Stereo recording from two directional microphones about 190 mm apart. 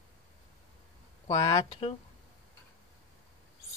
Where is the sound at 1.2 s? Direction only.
25° left (ahead or behind).